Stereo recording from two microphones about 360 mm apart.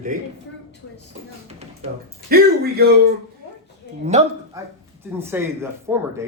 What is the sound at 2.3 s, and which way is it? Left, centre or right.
Speech, right.